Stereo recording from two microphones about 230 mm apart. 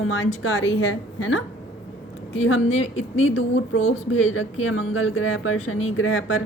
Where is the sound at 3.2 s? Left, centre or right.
Left.